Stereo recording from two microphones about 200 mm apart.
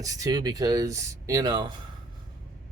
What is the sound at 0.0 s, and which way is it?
Speech, 15° right (ahead or behind).